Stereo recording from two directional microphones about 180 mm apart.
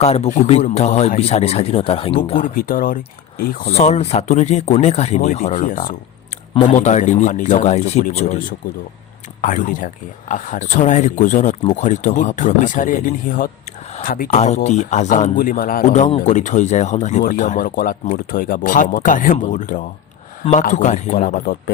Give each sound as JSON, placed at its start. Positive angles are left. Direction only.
{"t": 0.0, "sound": "speech", "side_deg": 35}
{"t": 2.4, "sound": "speech", "side_deg": 50}
{"t": 3.7, "sound": "speech", "side_deg": 35}
{"t": 15.8, "sound": "speech", "side_deg": 40}